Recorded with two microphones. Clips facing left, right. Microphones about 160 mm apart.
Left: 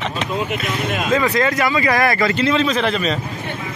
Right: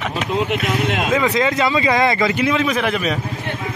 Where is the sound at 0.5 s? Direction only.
70° right (ahead or behind).